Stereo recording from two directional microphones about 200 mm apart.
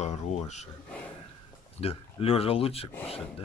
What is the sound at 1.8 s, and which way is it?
Speech, 30° left (ahead or behind).